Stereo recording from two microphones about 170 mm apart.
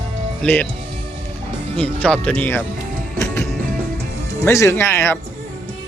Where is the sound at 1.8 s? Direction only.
5° left (ahead or behind).